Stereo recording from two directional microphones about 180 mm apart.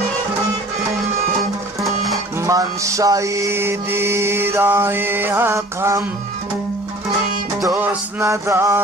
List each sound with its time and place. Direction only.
2.4 s mantra: 15° right (ahead or behind)
7.6 s mantra: 15° right (ahead or behind)